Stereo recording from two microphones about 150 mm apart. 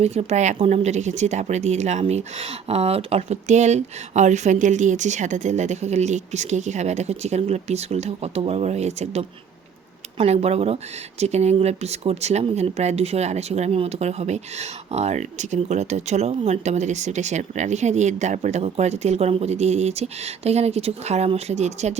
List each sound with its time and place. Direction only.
0.0 s speech: 45° right (ahead or behind)